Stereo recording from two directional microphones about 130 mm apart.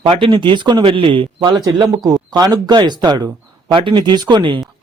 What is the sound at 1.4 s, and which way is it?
A man's voice, 30° right (ahead or behind).